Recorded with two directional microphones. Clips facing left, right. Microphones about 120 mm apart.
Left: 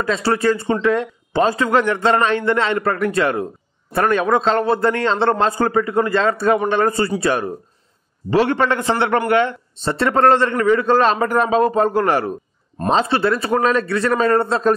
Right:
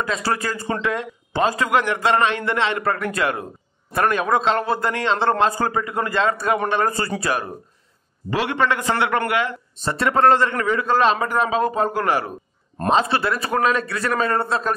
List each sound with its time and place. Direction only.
0.0 s a man's voice: 30° left (ahead or behind)
12.9 s a man's voice: 30° left (ahead or behind)